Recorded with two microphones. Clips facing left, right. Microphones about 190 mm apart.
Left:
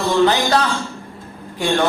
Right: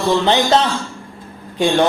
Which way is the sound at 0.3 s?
25° right (ahead or behind).